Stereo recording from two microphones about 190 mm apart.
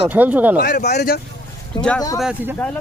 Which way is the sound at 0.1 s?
10° right (ahead or behind).